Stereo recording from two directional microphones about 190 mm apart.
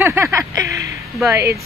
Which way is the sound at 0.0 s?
15° right (ahead or behind).